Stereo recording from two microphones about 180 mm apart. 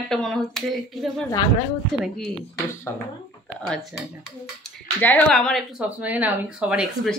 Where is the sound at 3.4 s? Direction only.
Centre (ahead or behind).